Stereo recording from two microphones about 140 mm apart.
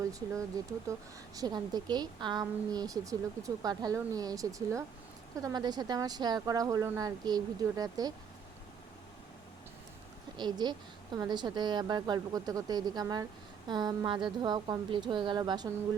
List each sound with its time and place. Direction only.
0.6 s a woman's voice: 25° right (ahead or behind)
10.3 s a woman's voice: 30° right (ahead or behind)